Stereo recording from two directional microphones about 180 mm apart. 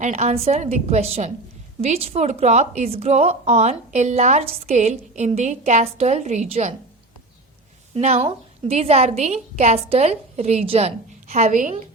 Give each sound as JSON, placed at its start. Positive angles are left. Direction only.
{"t": 0.0, "sound": "a woman's voice", "side_deg": -40}
{"t": 7.9, "sound": "a woman's voice", "side_deg": -35}